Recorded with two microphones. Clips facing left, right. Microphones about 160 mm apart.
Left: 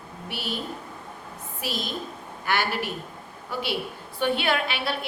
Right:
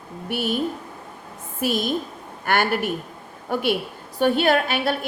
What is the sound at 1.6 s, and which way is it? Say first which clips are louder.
A woman's voice: right 9 dB; 50° right (ahead or behind).